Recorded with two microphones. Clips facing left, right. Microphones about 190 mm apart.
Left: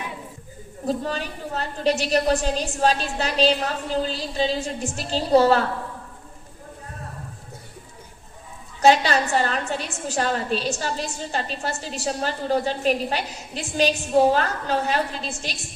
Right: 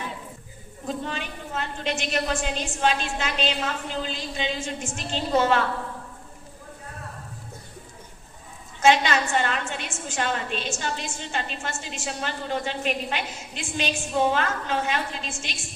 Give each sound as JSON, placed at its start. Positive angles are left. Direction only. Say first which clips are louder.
{"t": 0.9, "sound": "a woman's voice", "louder": "left 5 dB", "side_deg": 40}
{"t": 8.8, "sound": "a woman's voice", "louder": "left 3 dB", "side_deg": 35}